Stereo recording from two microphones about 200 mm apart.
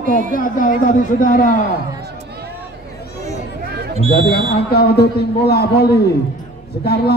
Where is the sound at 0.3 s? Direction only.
45° left (ahead or behind).